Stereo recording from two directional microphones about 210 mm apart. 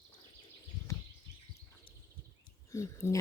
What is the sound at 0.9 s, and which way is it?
Bird, 15° left (ahead or behind).